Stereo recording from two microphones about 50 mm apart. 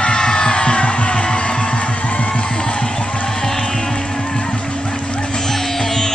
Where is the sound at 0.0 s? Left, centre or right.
Centre.